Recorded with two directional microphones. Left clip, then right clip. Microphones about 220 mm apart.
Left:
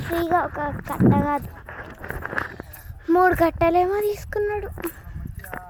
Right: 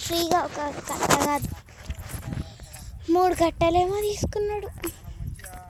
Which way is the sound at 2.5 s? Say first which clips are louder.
Left 6 dB; 10° right (ahead or behind).